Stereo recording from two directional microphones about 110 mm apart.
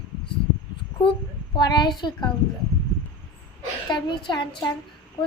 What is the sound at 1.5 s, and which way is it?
Speech, 40° left (ahead or behind).